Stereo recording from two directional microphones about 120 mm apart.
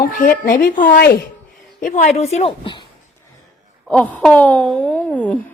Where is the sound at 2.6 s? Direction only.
40° left (ahead or behind).